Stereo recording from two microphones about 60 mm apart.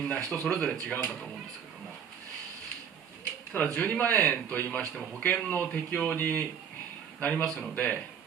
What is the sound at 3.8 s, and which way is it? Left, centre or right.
A man's voice, left.